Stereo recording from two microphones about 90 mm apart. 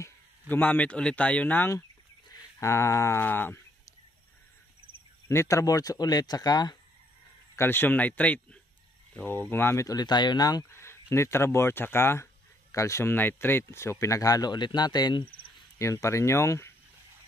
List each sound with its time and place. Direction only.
0.5 s speech: 20° left (ahead or behind)
2.6 s speech: 35° left (ahead or behind)
5.3 s speech: 35° left (ahead or behind)
7.5 s speech: 25° left (ahead or behind)
9.8 s speech: 50° left (ahead or behind)
10.7 s speech: 30° left (ahead or behind); by 15.2 s 55° left (ahead or behind)
15.8 s speech: 35° left (ahead or behind)